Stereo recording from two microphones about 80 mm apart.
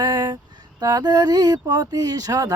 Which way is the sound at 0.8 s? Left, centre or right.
Right.